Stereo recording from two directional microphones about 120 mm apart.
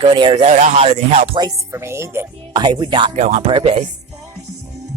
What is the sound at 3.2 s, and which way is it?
Speech, 75° right (ahead or behind).